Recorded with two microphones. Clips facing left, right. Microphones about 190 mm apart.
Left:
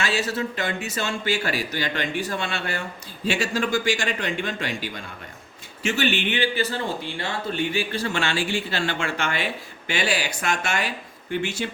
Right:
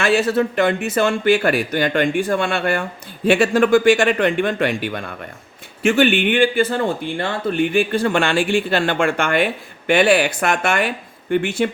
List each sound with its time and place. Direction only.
0.0 s speech: 55° right (ahead or behind)